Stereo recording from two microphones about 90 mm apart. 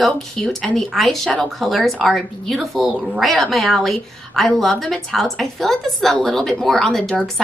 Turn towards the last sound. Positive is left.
turn(degrees=5)  # may be behind; listen again after turning